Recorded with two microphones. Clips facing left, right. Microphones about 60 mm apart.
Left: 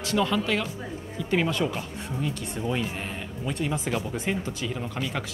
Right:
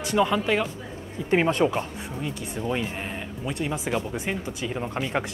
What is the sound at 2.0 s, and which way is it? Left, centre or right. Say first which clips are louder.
Speech: left 1 dB; centre.